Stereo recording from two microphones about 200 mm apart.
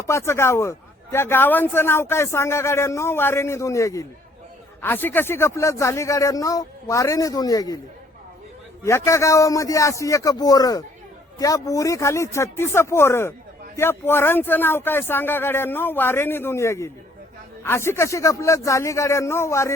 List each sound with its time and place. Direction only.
0.1 s a man's voice: 15° left (ahead or behind)
8.8 s a man's voice: 15° left (ahead or behind)